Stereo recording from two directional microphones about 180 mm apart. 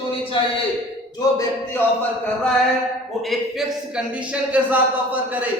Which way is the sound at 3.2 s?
Centre (ahead or behind).